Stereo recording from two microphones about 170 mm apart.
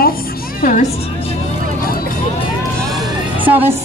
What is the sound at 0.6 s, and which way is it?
Speech, 50° left (ahead or behind).